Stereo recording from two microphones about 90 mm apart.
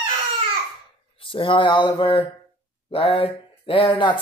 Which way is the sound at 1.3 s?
70° left (ahead or behind).